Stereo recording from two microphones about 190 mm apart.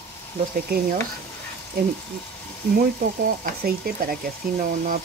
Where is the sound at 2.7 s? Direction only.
55° right (ahead or behind).